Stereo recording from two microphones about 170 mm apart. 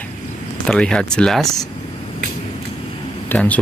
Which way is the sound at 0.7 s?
5° left (ahead or behind).